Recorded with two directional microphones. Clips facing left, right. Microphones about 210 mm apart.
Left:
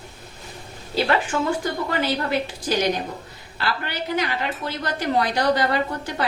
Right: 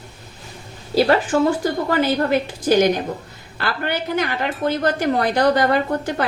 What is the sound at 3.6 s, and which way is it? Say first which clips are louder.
A woman's voice: right 4 dB; 50° right (ahead or behind).